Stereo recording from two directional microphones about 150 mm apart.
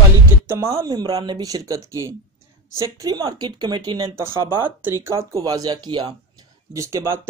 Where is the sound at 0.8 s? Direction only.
25° right (ahead or behind).